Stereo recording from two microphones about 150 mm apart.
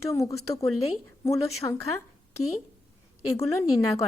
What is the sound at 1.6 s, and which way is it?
Speech, 25° left (ahead or behind).